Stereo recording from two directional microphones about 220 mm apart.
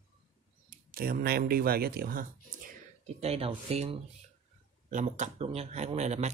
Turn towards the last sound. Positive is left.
turn(degrees=-30)  # may be behind; listen again after turning